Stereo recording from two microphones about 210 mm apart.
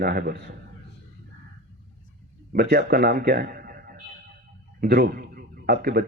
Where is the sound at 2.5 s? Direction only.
50° right (ahead or behind).